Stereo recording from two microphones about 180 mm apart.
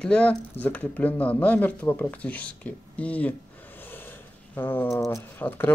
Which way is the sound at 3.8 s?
10° left (ahead or behind).